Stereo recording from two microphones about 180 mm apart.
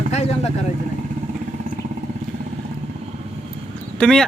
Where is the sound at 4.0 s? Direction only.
5° left (ahead or behind).